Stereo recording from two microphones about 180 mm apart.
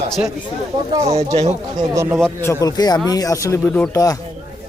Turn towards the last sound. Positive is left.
turn(degrees=15)  # may be behind; listen again after turning